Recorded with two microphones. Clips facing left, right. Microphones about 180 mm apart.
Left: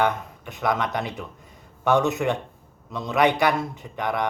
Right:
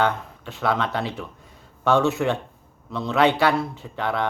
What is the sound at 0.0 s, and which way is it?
A man's voice, 15° left (ahead or behind).